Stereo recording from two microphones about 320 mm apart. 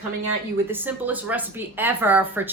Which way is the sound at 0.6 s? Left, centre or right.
Centre.